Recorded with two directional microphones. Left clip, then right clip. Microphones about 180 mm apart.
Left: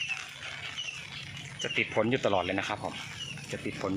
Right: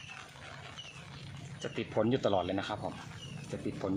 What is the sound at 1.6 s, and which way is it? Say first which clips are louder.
Speech: left 5 dB; centre (ahead or behind).